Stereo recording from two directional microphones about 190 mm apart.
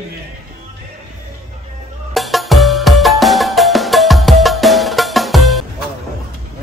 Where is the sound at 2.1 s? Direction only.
Centre (ahead or behind).